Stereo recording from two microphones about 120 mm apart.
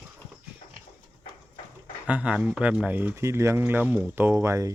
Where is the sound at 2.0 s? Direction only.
10° right (ahead or behind).